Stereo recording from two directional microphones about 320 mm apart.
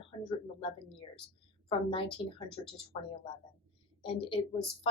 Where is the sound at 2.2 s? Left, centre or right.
Centre.